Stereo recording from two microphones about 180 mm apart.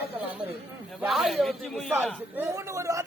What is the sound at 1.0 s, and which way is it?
Speech, centre (ahead or behind).